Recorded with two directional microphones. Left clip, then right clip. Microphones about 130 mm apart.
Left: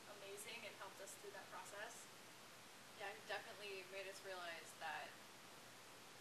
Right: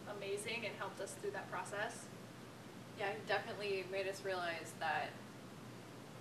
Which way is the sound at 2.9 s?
5° left (ahead or behind).